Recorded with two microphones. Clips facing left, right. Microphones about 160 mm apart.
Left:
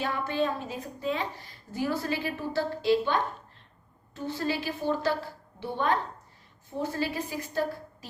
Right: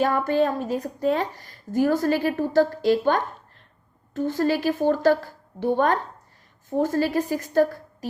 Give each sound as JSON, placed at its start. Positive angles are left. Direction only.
{"t": 0.0, "sound": "a woman's voice", "side_deg": -45}